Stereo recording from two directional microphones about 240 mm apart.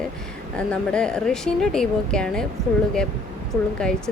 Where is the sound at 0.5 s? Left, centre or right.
Centre.